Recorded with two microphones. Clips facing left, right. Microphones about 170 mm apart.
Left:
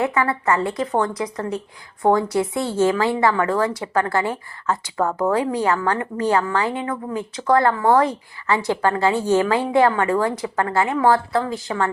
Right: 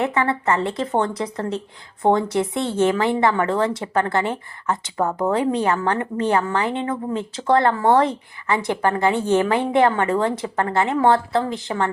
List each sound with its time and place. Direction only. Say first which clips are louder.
0.0 s a woman's voice: even; 25° right (ahead or behind)